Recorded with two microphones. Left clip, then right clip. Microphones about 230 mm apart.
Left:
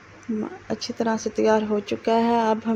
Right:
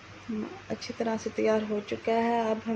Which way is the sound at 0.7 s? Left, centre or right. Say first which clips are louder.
Left 6 dB; left.